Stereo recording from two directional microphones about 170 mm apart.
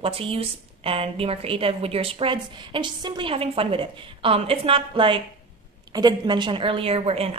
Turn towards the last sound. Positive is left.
turn(degrees=-35)  # may be behind; listen again after turning